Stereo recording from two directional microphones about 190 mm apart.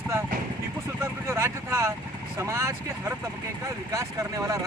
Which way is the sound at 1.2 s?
15° right (ahead or behind).